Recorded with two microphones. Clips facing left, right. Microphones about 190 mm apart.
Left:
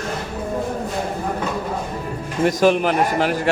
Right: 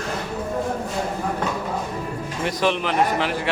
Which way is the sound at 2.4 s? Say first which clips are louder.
Left 7 dB; 45° left (ahead or behind).